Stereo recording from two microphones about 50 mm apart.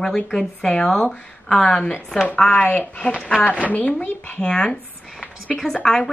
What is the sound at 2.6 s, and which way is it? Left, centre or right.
Speech, left.